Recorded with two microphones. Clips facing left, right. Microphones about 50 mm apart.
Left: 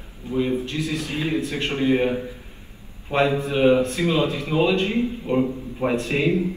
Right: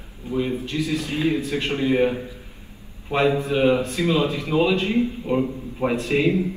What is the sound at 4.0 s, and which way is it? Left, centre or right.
Speech, left.